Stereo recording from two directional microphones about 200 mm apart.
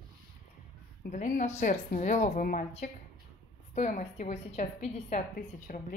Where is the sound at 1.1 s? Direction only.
40° left (ahead or behind).